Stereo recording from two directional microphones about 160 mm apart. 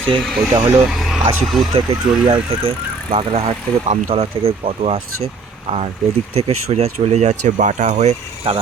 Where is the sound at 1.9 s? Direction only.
35° right (ahead or behind).